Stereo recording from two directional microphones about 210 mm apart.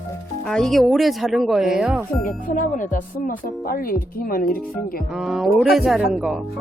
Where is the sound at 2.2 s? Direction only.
40° left (ahead or behind).